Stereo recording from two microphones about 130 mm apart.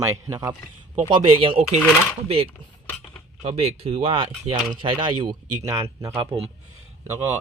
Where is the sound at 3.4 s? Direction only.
50° right (ahead or behind).